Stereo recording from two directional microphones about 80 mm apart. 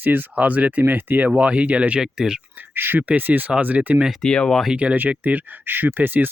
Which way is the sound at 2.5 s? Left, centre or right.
Right.